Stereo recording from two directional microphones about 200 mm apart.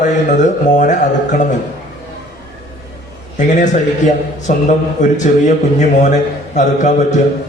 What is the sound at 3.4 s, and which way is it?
A man's voice, 40° left (ahead or behind).